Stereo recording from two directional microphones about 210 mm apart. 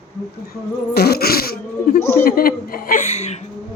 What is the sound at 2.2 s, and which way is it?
Chuckle, 45° left (ahead or behind).